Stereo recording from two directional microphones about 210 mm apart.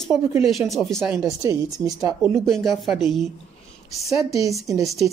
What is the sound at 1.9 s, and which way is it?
Speech, 15° right (ahead or behind).